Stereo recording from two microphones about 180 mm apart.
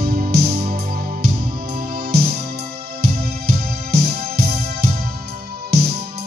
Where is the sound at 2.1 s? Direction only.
60° right (ahead or behind).